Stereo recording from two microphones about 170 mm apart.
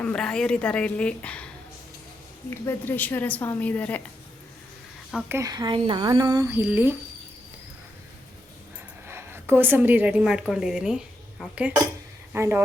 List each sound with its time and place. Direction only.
0.0 s a woman's voice: 5° left (ahead or behind)
2.6 s a woman's voice: 10° left (ahead or behind)
5.4 s speech: 25° right (ahead or behind)
9.0 s speech: 15° right (ahead or behind)